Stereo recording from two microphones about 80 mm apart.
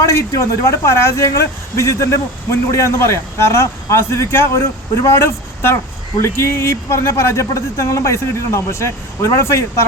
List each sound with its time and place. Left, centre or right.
0.0 s speech: left